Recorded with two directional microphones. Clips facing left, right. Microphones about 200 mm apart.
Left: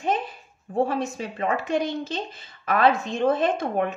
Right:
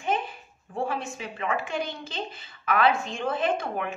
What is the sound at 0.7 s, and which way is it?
A woman's voice, 40° left (ahead or behind).